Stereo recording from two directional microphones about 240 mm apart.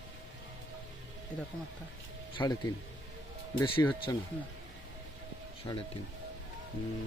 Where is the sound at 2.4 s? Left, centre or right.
Centre.